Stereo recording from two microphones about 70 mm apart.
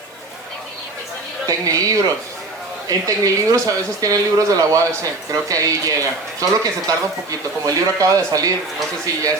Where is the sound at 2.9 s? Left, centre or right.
Right.